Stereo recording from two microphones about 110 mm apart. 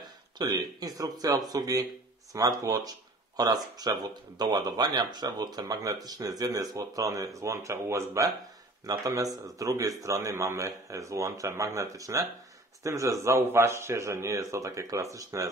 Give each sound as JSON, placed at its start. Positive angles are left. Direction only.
{"t": 0.0, "sound": "speech", "side_deg": -40}